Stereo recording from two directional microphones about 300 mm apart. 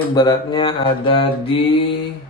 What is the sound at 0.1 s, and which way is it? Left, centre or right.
A man's voice, centre.